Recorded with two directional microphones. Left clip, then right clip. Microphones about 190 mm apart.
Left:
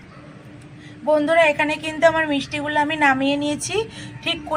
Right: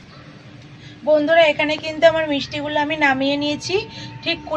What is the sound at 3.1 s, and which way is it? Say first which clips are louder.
A woman's voice: right 1 dB; centre (ahead or behind).